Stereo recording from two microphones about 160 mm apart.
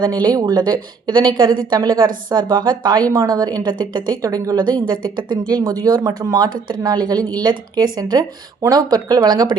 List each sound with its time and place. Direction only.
0.0 s a woman's voice: 25° right (ahead or behind)